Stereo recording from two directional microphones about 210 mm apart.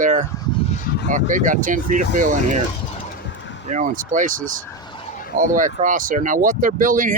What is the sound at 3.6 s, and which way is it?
Speech, 35° right (ahead or behind).